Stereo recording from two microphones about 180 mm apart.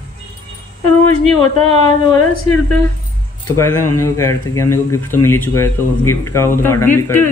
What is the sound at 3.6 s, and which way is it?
Speech, 15° left (ahead or behind).